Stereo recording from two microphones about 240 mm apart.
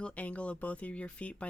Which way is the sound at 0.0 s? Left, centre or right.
Centre.